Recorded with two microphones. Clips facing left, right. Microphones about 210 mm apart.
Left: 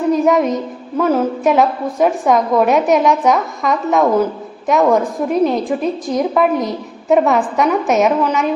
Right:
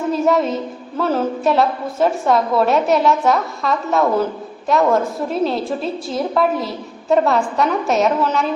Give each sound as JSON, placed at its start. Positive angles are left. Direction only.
{"t": 0.1, "sound": "a woman's voice", "side_deg": 15}